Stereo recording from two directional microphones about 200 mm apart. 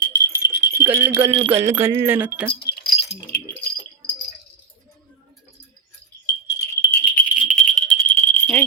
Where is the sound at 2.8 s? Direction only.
25° left (ahead or behind).